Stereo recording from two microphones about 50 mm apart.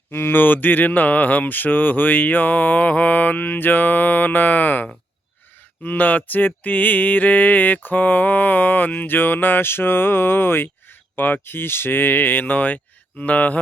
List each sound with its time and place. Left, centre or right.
0.1 s mantra: left